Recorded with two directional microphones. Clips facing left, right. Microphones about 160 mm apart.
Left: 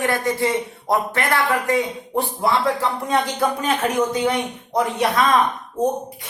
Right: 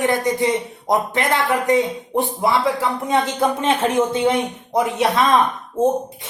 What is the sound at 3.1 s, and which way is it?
A woman's voice, 25° right (ahead or behind).